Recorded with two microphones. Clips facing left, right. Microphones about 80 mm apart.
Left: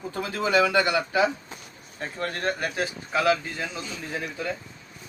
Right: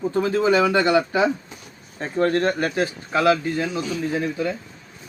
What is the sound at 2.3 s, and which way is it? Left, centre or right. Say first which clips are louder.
Speech: right 7 dB; right.